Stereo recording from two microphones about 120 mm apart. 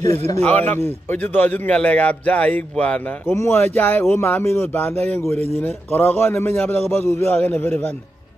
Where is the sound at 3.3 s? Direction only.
25° left (ahead or behind).